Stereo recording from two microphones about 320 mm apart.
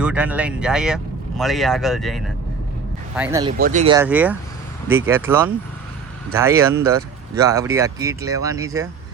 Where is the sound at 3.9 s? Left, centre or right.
Centre.